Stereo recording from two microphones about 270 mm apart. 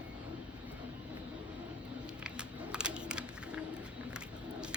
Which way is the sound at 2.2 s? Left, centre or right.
Centre.